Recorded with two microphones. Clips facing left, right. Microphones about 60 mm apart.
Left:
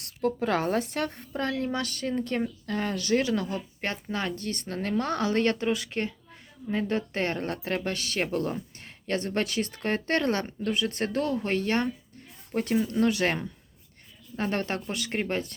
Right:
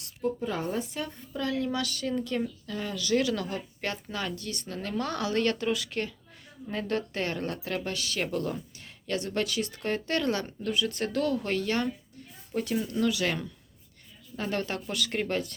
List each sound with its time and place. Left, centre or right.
0.0 s a woman's voice: left
1.3 s speech: left
3.2 s speech: left
7.1 s speech: left